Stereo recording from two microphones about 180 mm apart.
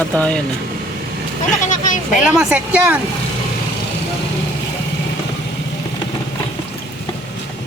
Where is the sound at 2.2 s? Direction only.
5° right (ahead or behind).